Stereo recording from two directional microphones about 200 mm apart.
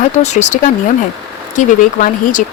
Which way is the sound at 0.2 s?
35° left (ahead or behind).